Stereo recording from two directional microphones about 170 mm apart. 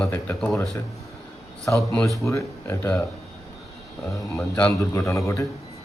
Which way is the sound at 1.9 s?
15° left (ahead or behind).